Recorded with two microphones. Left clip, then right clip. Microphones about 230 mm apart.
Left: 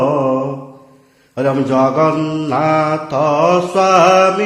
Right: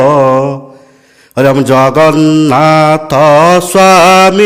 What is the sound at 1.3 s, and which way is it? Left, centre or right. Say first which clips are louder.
Mantra: right 8 dB; right.